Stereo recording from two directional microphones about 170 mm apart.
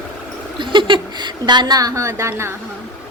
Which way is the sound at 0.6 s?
30° right (ahead or behind).